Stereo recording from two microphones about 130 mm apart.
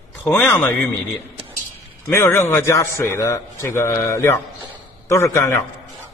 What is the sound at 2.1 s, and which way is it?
A man's voice, 20° left (ahead or behind).